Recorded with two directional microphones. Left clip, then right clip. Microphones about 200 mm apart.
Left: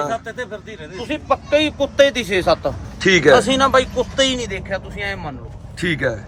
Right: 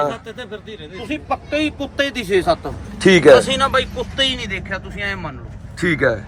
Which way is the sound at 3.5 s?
25° left (ahead or behind).